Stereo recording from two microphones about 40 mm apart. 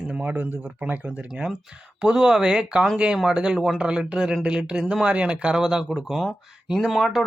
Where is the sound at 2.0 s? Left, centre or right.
Centre.